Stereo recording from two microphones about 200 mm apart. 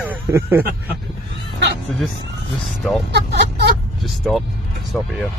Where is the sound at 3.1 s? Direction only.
55° right (ahead or behind).